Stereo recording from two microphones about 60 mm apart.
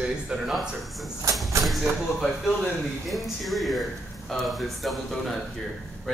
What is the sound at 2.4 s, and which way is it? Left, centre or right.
Speech, centre.